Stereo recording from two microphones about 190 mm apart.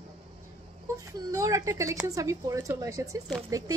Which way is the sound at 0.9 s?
15° right (ahead or behind).